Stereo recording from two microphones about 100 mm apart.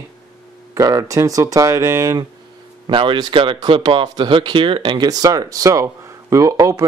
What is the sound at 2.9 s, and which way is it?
Speech, 55° right (ahead or behind).